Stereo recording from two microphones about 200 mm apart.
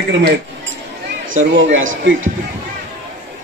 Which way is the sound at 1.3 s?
70° right (ahead or behind).